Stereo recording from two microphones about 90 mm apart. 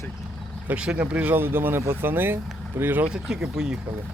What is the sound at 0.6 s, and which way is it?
Speech, 10° right (ahead or behind).